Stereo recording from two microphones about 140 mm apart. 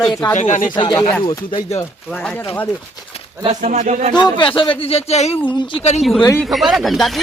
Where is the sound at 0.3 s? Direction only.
60° left (ahead or behind).